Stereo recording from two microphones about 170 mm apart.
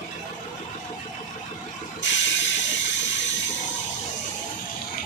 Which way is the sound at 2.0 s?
90° left.